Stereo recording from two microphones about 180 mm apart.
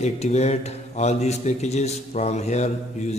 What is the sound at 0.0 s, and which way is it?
Speech, 40° left (ahead or behind).